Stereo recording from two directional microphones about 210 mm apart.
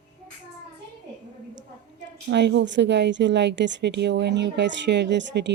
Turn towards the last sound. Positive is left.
turn(degrees=-55)  # may be behind; listen again after turning